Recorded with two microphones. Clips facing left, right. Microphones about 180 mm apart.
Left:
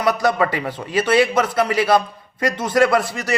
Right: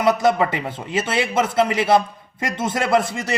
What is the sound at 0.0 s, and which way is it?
A man's voice, 25° right (ahead or behind).